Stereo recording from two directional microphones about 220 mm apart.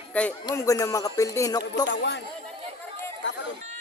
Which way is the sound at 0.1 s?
5° left (ahead or behind).